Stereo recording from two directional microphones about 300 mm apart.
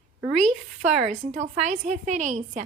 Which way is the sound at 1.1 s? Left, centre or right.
Right.